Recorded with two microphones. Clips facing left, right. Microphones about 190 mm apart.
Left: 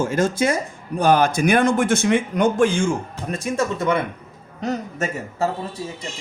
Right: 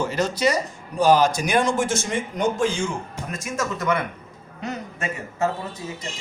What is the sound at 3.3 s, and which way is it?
Speech, 30° left (ahead or behind).